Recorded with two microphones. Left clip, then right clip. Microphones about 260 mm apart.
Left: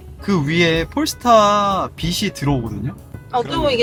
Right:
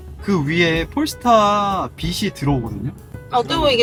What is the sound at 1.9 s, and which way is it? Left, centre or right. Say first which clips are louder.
Speech: left 2 dB; centre.